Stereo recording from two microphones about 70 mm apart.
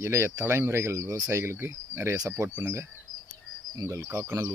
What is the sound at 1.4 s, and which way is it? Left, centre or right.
Speech, right.